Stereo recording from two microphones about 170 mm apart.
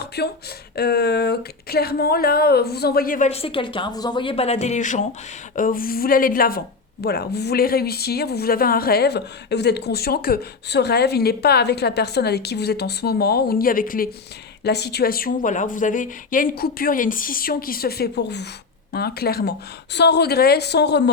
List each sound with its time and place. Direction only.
0.2 s a woman's voice: 75° left (ahead or behind); by 3.2 s 55° left (ahead or behind)
3.2 s a woman's voice: 35° left (ahead or behind); by 6.6 s 60° left (ahead or behind)
7.0 s a woman's voice: 70° left (ahead or behind); by 14.1 s 55° left (ahead or behind)
14.6 s a woman's voice: 75° left (ahead or behind)
18.9 s a woman's voice: 65° left (ahead or behind)